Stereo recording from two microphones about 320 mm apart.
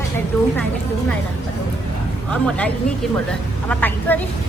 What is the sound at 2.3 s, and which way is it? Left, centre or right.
Speech, centre.